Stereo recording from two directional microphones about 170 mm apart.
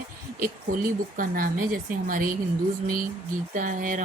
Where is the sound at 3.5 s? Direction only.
50° right (ahead or behind).